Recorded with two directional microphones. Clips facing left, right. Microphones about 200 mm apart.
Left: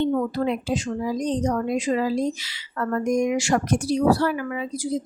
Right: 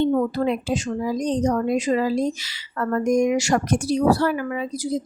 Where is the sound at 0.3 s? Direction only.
45° right (ahead or behind).